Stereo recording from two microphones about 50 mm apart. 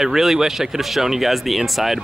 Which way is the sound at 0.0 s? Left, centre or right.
Centre.